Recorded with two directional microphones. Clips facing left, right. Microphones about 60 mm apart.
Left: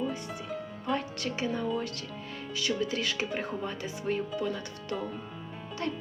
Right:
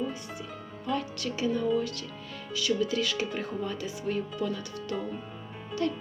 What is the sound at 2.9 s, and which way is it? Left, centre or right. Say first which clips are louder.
Speech: right 2 dB; left.